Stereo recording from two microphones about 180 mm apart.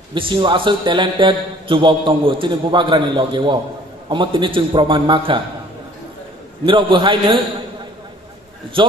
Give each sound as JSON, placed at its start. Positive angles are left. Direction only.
{"t": 0.1, "sound": "a man's voice", "side_deg": -25}
{"t": 6.6, "sound": "a man's voice", "side_deg": -25}
{"t": 8.8, "sound": "a man's voice", "side_deg": -30}